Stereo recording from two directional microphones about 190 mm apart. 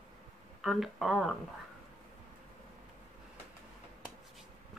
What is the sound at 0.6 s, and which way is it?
Speech, centre (ahead or behind).